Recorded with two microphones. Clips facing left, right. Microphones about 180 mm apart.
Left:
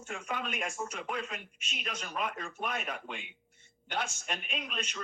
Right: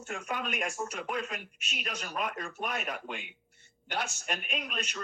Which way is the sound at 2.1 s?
45° right (ahead or behind).